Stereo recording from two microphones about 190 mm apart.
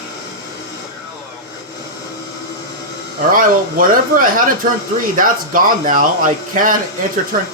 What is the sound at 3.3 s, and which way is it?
Speech, 45° right (ahead or behind).